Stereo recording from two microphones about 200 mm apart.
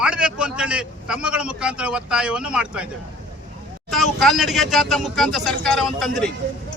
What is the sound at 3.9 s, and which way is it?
Speech, centre (ahead or behind).